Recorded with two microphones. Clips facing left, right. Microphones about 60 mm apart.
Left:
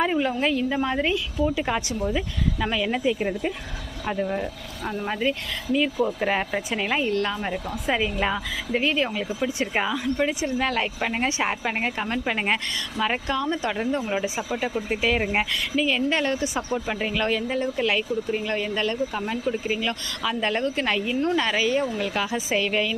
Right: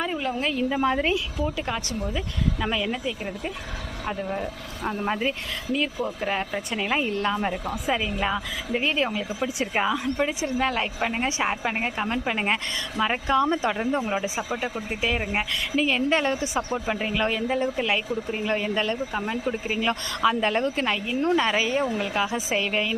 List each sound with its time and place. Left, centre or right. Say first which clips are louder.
0.2 s speech: left 3 dB; centre
1.5 s speech: left 3 dB; centre
2.1 s speech: left 2 dB; centre
4.0 s speech: left 3 dB; centre
4.8 s speech: even; centre
5.7 s speech: left 4 dB; centre
6.1 s speech: left 3 dB; centre
7.9 s speech: left 2 dB; centre
13.4 s speech: right 3 dB; right
13.7 s speech: right 1 dB; centre
15.2 s speech: left 3 dB; centre
15.7 s speech: right 1 dB; centre
19.8 s speech: right 4 dB; right